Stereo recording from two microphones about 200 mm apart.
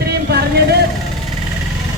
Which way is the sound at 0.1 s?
55° right (ahead or behind).